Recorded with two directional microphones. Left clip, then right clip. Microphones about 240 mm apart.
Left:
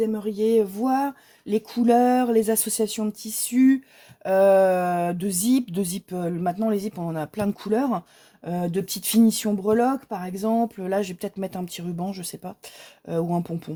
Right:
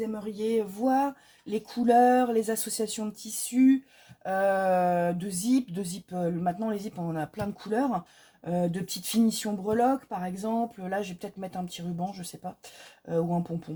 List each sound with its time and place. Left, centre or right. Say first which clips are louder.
0.1 s speech: left 8 dB; left